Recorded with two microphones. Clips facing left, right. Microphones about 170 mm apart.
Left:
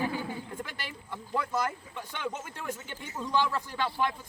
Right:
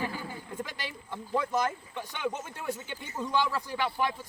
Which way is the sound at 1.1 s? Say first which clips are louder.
Right 2 dB; 15° right (ahead or behind).